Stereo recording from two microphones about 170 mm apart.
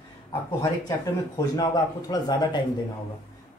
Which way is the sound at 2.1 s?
25° left (ahead or behind).